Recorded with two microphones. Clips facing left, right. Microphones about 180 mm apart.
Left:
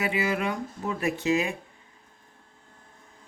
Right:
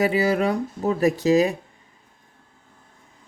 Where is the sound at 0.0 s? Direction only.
35° right (ahead or behind).